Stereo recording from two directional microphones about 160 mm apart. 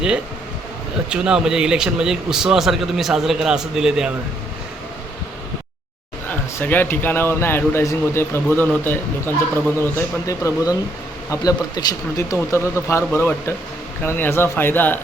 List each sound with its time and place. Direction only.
1.1 s speech: 5° right (ahead or behind)
6.6 s speech: 10° left (ahead or behind)